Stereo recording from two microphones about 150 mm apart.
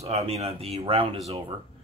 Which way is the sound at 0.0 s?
45° right (ahead or behind).